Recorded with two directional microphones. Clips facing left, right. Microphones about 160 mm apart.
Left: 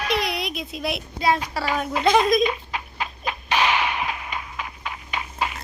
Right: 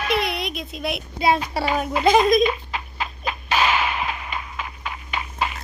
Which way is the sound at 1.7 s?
5° right (ahead or behind).